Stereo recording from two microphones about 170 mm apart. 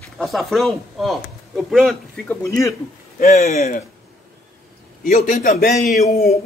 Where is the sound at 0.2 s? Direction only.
Centre (ahead or behind).